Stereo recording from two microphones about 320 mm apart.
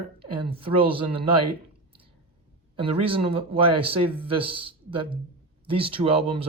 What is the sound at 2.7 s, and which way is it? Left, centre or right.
Speech, centre.